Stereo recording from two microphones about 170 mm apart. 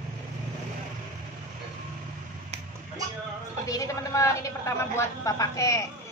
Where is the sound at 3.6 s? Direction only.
20° left (ahead or behind).